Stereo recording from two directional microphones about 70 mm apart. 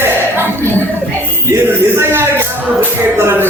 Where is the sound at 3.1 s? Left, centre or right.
Right.